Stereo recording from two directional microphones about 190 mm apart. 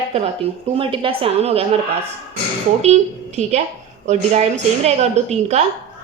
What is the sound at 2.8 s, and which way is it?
A woman's voice, 35° right (ahead or behind).